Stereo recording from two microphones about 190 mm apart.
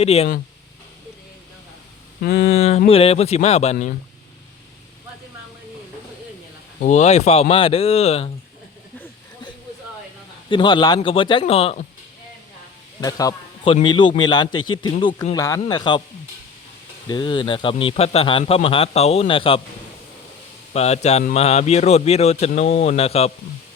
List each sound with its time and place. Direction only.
0.0 s a man's voice: 35° left (ahead or behind)
2.2 s a sound: 55° left (ahead or behind)
2.5 s a man's voice: 35° left (ahead or behind)
6.8 s a man's voice: 35° left (ahead or behind)
10.5 s a man's voice: 25° left (ahead or behind)
13.0 s a man's voice: 20° left (ahead or behind)
14.5 s a man's voice: 90° left
15.0 s a man's voice: 20° left (ahead or behind)
17.1 s a man's voice: 25° left (ahead or behind)
20.7 s a man's voice: 35° left (ahead or behind)